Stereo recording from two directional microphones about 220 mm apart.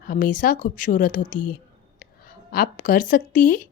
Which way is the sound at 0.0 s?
40° left (ahead or behind).